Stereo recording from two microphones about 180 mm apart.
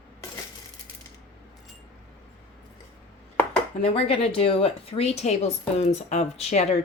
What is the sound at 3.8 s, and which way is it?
Speech, 30° left (ahead or behind).